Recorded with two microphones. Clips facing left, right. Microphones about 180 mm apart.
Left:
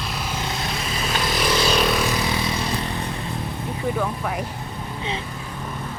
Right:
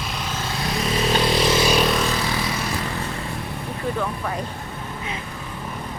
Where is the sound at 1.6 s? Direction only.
10° right (ahead or behind).